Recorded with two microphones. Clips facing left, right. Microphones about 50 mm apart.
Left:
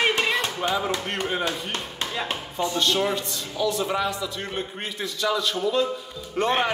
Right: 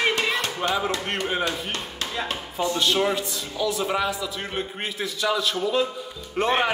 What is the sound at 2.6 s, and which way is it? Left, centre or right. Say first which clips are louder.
A man's voice: right 1 dB; centre.